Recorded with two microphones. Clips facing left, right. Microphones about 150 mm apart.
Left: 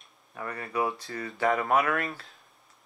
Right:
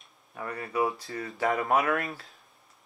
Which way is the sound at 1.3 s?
Centre (ahead or behind).